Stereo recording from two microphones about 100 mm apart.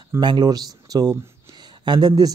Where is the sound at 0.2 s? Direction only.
45° right (ahead or behind).